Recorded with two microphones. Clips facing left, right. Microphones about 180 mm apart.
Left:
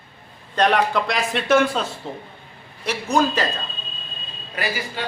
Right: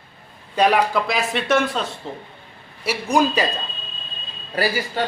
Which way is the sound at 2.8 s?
10° right (ahead or behind).